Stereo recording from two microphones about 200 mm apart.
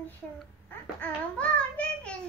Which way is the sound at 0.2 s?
5° left (ahead or behind).